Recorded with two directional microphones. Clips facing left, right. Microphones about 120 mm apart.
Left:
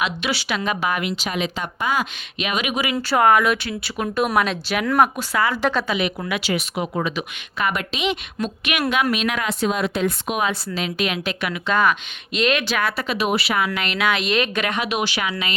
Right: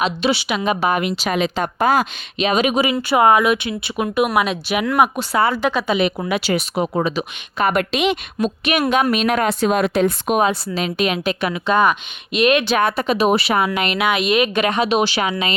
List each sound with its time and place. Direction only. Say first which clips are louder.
0.0 s speech: right 5 dB; 25° right (ahead or behind)
1.3 s speech: right 6 dB; 45° right (ahead or behind)
3.1 s speech: right 2 dB; 20° right (ahead or behind)
5.1 s speech: right 4 dB; 30° right (ahead or behind)
7.8 s a woman's voice: right 6 dB; 60° right (ahead or behind)
8.4 s speech: right 5 dB; 35° right (ahead or behind)
9.1 s speech: right 6 dB; 45° right (ahead or behind)
10.9 s speech: right 6 dB; 25° right (ahead or behind)
13.1 s speech: right 5 dB; 40° right (ahead or behind)
13.7 s speech: right 3 dB; 20° right (ahead or behind)